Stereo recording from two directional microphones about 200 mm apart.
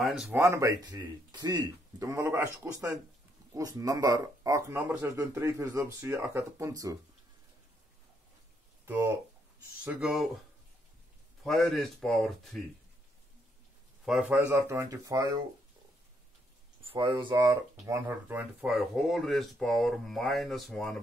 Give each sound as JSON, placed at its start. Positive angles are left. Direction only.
{"t": 0.0, "sound": "speech", "side_deg": -5}
{"t": 0.4, "sound": "speech", "side_deg": -15}
{"t": 8.8, "sound": "speech", "side_deg": -10}
{"t": 11.4, "sound": "speech", "side_deg": 0}
{"t": 14.0, "sound": "speech", "side_deg": -5}
{"t": 16.9, "sound": "speech", "side_deg": -25}